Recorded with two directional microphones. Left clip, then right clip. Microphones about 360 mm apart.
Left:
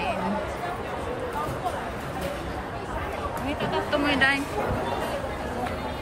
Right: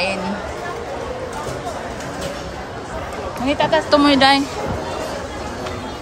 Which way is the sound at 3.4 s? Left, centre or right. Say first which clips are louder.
Right 13 dB; centre.